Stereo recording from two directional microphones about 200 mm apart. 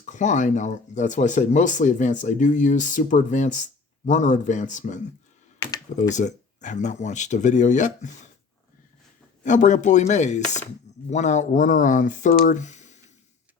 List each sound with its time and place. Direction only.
0.0 s speech: 40° left (ahead or behind)
6.1 s speech: 35° left (ahead or behind)
9.4 s speech: 40° left (ahead or behind)